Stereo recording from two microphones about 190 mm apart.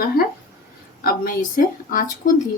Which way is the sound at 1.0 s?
50° left (ahead or behind).